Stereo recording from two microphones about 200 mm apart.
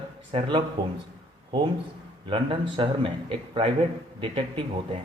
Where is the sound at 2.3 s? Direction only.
25° right (ahead or behind).